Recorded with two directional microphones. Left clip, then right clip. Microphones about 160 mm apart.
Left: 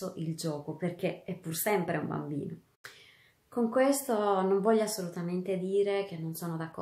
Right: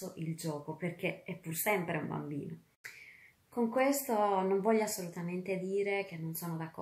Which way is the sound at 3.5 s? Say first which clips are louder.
Left 4 dB; 20° left (ahead or behind).